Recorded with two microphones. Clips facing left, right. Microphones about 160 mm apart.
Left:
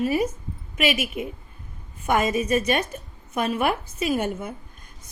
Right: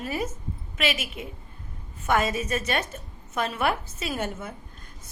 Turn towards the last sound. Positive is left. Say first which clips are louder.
# left 6 dB
turn(degrees=15)  # may be behind; listen again after turning